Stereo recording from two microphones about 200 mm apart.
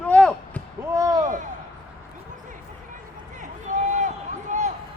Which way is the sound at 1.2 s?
35° right (ahead or behind).